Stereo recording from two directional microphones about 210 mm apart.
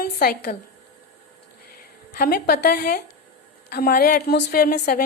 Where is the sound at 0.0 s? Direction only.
45° left (ahead or behind).